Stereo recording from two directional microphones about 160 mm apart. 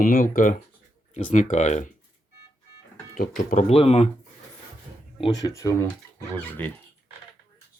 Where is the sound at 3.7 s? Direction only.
40° left (ahead or behind).